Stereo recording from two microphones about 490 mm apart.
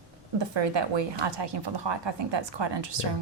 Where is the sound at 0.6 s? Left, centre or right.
Right.